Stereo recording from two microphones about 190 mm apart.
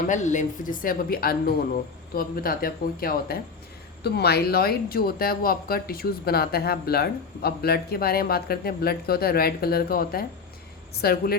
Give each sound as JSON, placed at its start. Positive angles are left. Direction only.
{"t": 0.1, "sound": "speech", "side_deg": 40}